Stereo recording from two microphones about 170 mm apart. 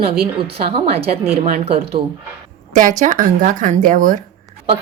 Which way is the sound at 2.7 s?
50° right (ahead or behind).